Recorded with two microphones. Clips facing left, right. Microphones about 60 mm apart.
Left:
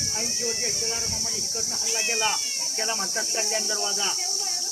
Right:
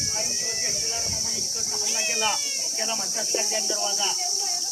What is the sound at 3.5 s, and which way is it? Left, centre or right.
Speech, left.